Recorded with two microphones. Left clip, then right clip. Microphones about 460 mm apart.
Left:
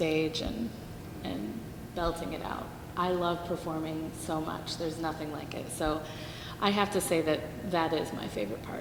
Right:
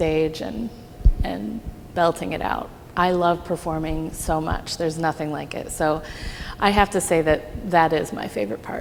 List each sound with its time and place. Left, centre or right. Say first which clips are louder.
0.0 s a woman's voice: right 8 dB; right
2.0 s a woman's voice: right 12 dB; right